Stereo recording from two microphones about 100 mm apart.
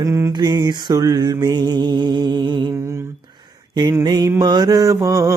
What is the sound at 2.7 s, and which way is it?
Lullaby, 25° right (ahead or behind).